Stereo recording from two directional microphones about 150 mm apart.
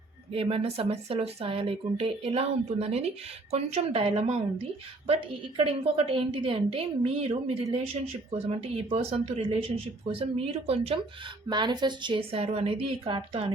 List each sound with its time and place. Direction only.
0.3 s a woman's voice: 40° right (ahead or behind)
5.5 s speech: 35° right (ahead or behind)
11.4 s speech: 30° right (ahead or behind)